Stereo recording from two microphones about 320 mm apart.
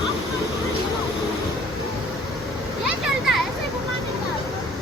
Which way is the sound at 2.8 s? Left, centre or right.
Centre.